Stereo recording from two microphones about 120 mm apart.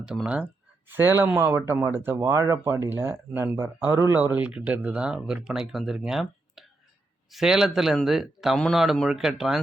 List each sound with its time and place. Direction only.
0.0 s speech: 10° right (ahead or behind)